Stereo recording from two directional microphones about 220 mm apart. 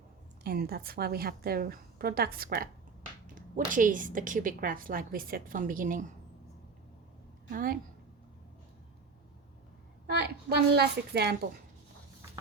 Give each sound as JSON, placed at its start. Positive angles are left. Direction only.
{"t": 0.4, "sound": "a woman's voice", "side_deg": -45}
{"t": 3.7, "sound": "a woman's voice", "side_deg": -35}
{"t": 7.5, "sound": "a woman's voice", "side_deg": -40}
{"t": 10.1, "sound": "a woman's voice", "side_deg": -50}